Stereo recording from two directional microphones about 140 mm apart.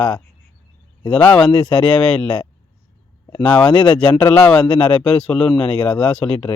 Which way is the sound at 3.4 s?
5° left (ahead or behind).